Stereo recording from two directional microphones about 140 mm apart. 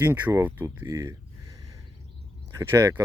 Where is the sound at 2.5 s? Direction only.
20° right (ahead or behind).